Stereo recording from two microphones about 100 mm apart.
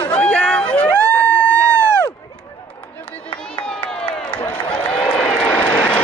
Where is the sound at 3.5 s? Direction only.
10° left (ahead or behind).